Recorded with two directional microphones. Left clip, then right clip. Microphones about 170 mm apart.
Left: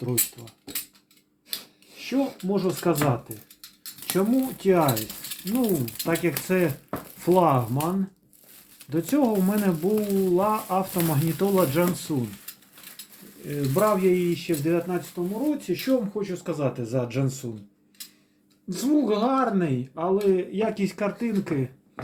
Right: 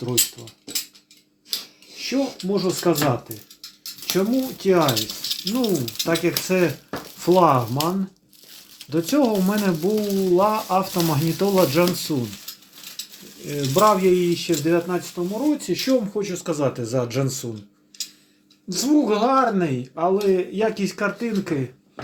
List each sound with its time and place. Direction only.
0.0 s speech: 15° right (ahead or behind)
2.0 s speech: 15° right (ahead or behind)
4.0 s speech: centre (ahead or behind)
8.9 s speech: centre (ahead or behind)
10.2 s speech: 5° right (ahead or behind)
13.7 s speech: 10° right (ahead or behind)
15.2 s speech: 20° right (ahead or behind)
18.7 s speech: 5° right (ahead or behind)